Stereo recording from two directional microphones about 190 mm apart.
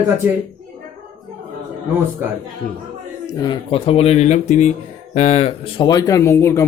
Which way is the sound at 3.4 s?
25° left (ahead or behind).